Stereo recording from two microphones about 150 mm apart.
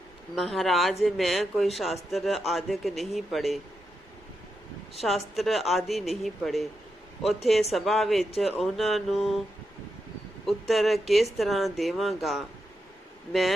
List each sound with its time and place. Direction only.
0.3 s a man's voice: centre (ahead or behind)
5.0 s a man's voice: centre (ahead or behind)
10.4 s a man's voice: centre (ahead or behind)